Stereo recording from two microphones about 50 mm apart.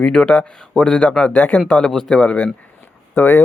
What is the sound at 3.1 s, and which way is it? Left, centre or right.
Speech, left.